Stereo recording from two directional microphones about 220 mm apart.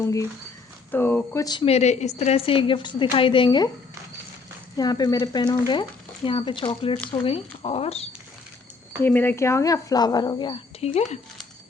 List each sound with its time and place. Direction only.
0.0 s a woman's voice: 15° left (ahead or behind)
4.8 s a woman's voice: 20° left (ahead or behind)
9.0 s speech: 10° left (ahead or behind); by 11.2 s 30° left (ahead or behind)